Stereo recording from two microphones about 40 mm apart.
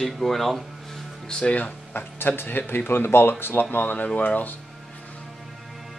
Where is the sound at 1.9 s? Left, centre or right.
Left.